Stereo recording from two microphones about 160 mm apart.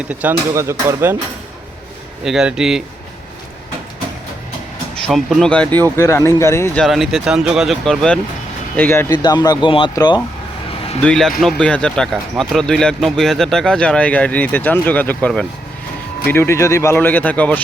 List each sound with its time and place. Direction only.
0.1 s speech: 10° right (ahead or behind)
2.2 s speech: 5° right (ahead or behind)
5.0 s speech: centre (ahead or behind); by 6.7 s 15° left (ahead or behind)
6.7 s speech: centre (ahead or behind); by 9.1 s 15° left (ahead or behind)
9.1 s speech: 25° left (ahead or behind)
11.0 s speech: 5° left (ahead or behind)